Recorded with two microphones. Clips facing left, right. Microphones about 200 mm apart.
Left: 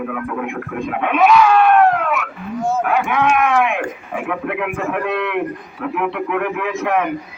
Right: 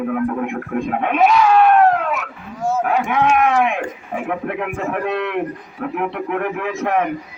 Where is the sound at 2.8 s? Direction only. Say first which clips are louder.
Right 1 dB; 35° right (ahead or behind).